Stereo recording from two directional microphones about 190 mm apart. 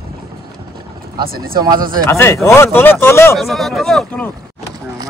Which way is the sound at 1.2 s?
50° right (ahead or behind).